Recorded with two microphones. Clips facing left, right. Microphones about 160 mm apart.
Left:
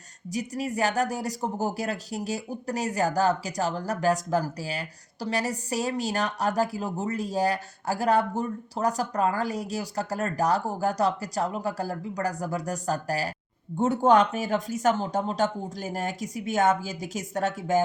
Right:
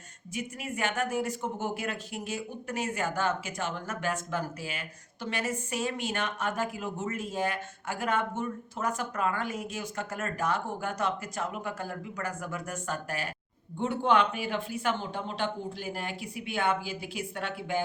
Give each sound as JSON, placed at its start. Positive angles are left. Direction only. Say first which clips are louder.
{"t": 0.3, "sound": "speech", "louder": "left 6 dB", "side_deg": 35}